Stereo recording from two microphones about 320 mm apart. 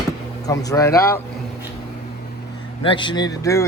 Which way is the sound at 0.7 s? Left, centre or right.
Centre.